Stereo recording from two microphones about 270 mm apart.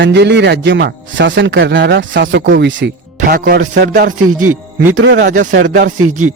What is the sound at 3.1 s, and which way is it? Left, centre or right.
Speech, right.